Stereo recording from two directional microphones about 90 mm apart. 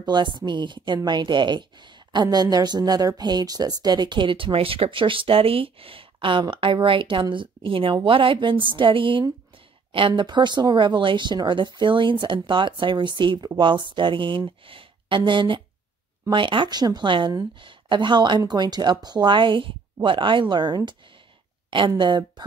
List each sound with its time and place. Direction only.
0.0 s a woman's voice: 55° right (ahead or behind)
2.2 s a woman's voice: 45° right (ahead or behind); by 6.0 s 90° right
6.4 s a woman's voice: 70° right (ahead or behind)
21.6 s a woman's voice: 65° right (ahead or behind)